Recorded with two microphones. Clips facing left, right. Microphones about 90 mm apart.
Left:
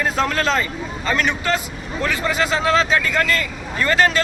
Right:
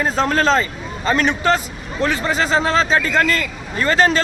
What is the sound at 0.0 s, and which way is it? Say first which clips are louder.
A man's voice: right 3 dB; 30° right (ahead or behind).